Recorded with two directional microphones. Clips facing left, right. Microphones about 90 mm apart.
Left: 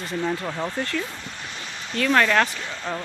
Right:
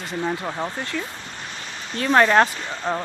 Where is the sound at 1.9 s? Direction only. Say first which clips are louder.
Right 3 dB; 25° right (ahead or behind).